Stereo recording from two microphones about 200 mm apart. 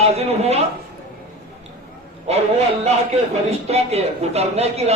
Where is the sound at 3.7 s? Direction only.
30° right (ahead or behind).